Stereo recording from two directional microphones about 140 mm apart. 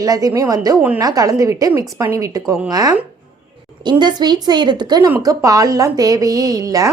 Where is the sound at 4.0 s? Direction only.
30° right (ahead or behind).